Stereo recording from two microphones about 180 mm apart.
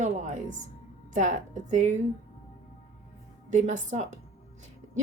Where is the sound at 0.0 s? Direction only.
40° right (ahead or behind).